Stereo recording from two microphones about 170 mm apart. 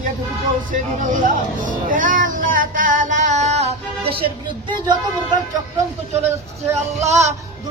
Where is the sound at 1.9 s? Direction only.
50° right (ahead or behind); by 4.3 s 35° right (ahead or behind).